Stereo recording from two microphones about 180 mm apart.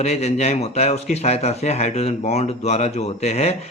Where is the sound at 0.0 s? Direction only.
35° left (ahead or behind).